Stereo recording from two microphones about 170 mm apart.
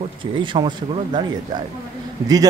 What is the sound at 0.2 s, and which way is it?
A man's voice, 30° right (ahead or behind).